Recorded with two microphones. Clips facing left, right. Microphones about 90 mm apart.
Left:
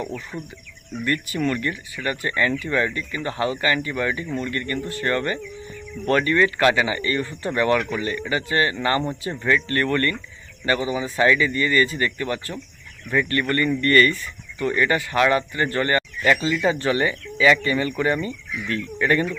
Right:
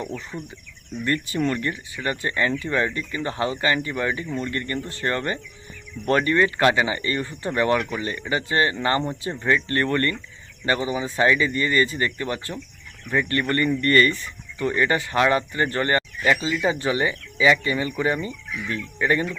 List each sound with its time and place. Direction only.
1.0 s speech: 25° right (ahead or behind)
16.3 s speech: 15° right (ahead or behind)